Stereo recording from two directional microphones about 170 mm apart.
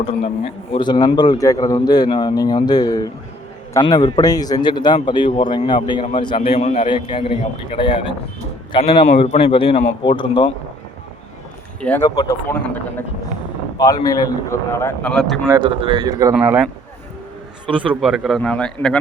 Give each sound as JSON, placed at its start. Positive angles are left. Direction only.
{"t": 0.0, "sound": "a man's voice", "side_deg": 35}
{"t": 9.0, "sound": "a man's voice", "side_deg": 40}
{"t": 11.8, "sound": "speech", "side_deg": 10}
{"t": 15.6, "sound": "speech", "side_deg": -30}
{"t": 16.3, "sound": "speech", "side_deg": -10}
{"t": 17.7, "sound": "a man's voice", "side_deg": -5}